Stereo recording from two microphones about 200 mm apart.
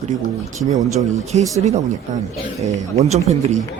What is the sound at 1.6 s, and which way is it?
A man's voice, 35° right (ahead or behind).